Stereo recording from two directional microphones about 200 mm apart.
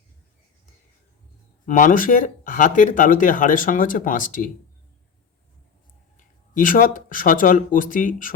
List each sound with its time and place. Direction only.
1.6 s speech: 40° left (ahead or behind)
6.1 s speech: 40° left (ahead or behind)